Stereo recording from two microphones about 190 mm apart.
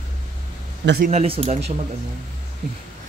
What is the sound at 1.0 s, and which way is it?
Speech, 35° right (ahead or behind).